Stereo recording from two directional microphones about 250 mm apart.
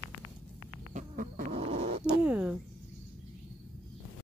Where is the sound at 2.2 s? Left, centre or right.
Centre.